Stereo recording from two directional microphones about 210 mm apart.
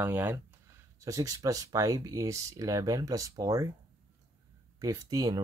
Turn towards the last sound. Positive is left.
turn(degrees=-15)  # may be behind; listen again after turning